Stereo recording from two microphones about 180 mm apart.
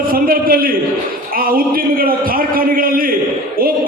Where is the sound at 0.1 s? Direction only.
55° right (ahead or behind).